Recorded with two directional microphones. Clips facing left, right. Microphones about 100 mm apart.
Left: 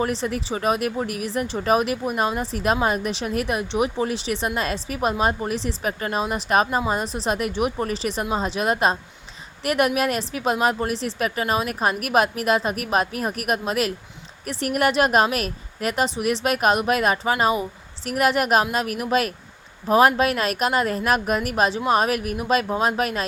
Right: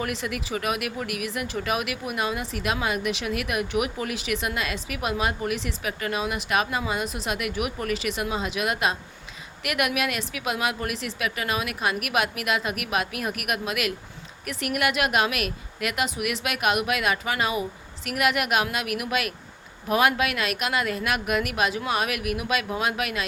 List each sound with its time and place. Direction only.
0.0 s speech: 30° left (ahead or behind)